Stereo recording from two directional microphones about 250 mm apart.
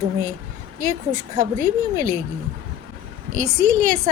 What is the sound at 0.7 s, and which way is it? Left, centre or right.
A woman's voice, right.